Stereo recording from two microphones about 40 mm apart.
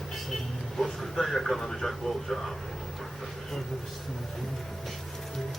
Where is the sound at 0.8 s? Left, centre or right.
Centre.